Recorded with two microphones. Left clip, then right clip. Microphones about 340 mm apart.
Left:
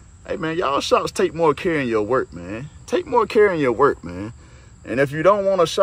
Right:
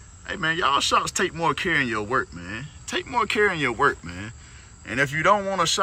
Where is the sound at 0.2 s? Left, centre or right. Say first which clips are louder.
Left 1 dB; centre.